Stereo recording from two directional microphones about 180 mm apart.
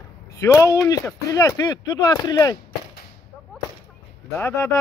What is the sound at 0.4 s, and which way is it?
Speech, 20° left (ahead or behind).